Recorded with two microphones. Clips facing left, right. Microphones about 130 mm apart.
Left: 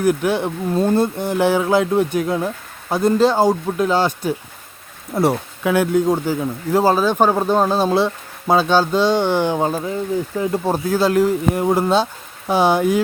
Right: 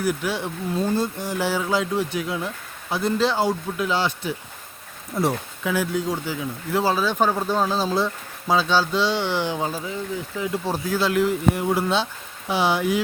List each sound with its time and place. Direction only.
0.0 s speech: 50° left (ahead or behind)
5.1 s speech: 60° left (ahead or behind); by 13.0 s 45° left (ahead or behind)